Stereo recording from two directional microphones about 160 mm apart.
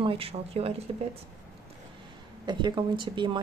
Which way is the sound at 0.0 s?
35° right (ahead or behind).